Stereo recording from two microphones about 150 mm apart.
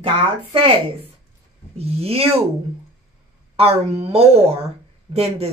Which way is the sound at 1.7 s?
45° right (ahead or behind).